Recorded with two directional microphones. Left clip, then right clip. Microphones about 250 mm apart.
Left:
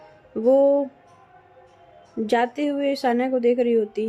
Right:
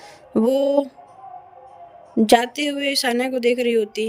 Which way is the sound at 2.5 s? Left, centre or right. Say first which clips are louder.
Right 1 dB; right.